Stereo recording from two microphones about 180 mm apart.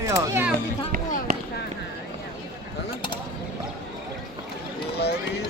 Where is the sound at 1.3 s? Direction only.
50° right (ahead or behind).